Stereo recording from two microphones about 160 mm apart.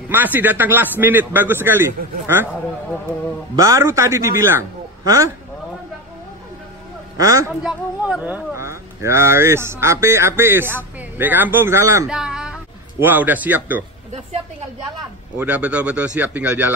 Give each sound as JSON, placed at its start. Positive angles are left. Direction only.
{"t": 0.1, "sound": "speech", "side_deg": -10}
{"t": 3.5, "sound": "a man's voice", "side_deg": -20}
{"t": 7.2, "sound": "a man's voice", "side_deg": -20}
{"t": 7.6, "sound": "speech", "side_deg": -5}
{"t": 12.1, "sound": "a sound", "side_deg": -5}
{"t": 13.0, "sound": "speech", "side_deg": -10}
{"t": 15.3, "sound": "speech", "side_deg": -10}